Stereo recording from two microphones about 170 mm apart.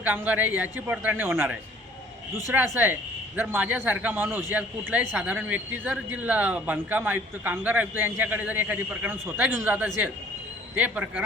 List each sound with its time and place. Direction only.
0.0 s a man's voice: 10° right (ahead or behind)
2.7 s a man's voice: 10° right (ahead or behind)